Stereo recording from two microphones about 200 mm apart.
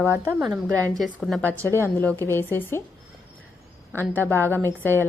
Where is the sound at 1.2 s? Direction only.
Centre (ahead or behind).